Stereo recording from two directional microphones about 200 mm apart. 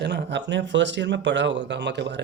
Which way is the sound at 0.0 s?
55° right (ahead or behind).